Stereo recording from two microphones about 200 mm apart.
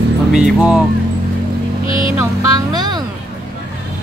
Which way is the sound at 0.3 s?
5° right (ahead or behind).